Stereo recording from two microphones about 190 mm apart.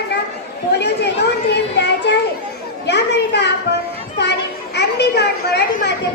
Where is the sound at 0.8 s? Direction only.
60° left (ahead or behind).